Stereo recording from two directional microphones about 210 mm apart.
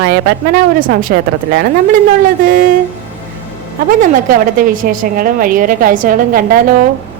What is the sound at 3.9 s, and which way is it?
A woman's voice, 40° right (ahead or behind).